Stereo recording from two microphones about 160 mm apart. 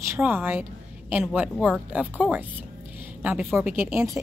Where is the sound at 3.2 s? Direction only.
10° right (ahead or behind).